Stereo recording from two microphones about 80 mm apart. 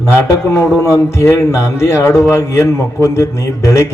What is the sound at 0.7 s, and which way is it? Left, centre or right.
Speech, left.